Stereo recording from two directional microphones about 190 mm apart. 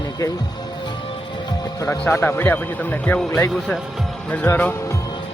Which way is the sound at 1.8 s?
15° left (ahead or behind).